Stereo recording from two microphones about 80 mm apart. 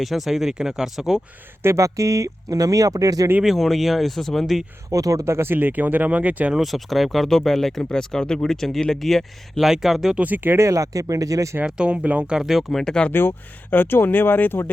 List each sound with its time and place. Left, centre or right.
0.0 s speech: centre
1.6 s speech: right
3.4 s speech: centre
4.9 s speech: right; by 6.5 s centre
6.5 s speech: centre
10.2 s speech: right
10.6 s speech: right
11.6 s speech: centre
12.4 s speech: centre
13.1 s speech: left